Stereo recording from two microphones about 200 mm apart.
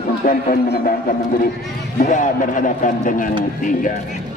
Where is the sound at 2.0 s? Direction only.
40° left (ahead or behind).